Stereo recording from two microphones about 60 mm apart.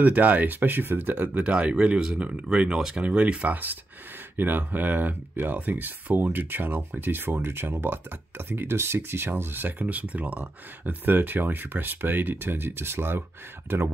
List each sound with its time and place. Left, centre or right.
0.0 s speech: right
1.3 s speech: centre; by 13.8 s right